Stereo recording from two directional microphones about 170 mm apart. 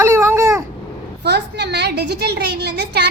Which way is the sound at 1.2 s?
75° right (ahead or behind).